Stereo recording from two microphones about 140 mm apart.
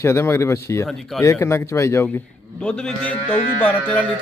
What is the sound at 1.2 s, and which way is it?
Speech, 20° left (ahead or behind).